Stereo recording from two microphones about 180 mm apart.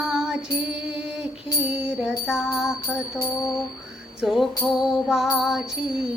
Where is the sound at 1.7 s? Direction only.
5° right (ahead or behind).